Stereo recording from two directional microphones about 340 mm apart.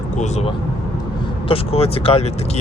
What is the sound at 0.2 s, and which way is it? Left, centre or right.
Speech, centre.